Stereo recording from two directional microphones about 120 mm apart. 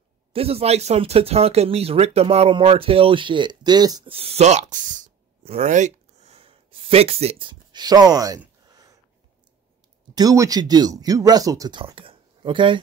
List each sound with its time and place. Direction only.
0.3 s speech: 55° right (ahead or behind); by 4.1 s 35° right (ahead or behind)
4.1 s speech: 55° right (ahead or behind); by 5.1 s 90° right
5.4 s a sound: 60° right (ahead or behind)
7.7 s speech: 35° right (ahead or behind)
10.1 s speech: 30° right (ahead or behind)
11.8 s speech: 50° right (ahead or behind)